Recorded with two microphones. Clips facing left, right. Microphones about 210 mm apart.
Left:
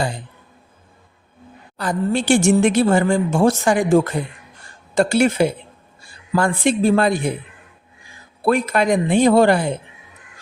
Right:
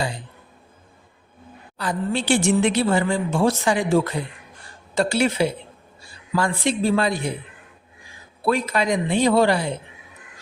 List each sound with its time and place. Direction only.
1.8 s a woman's voice: 45° left (ahead or behind)
8.4 s a woman's voice: 50° left (ahead or behind)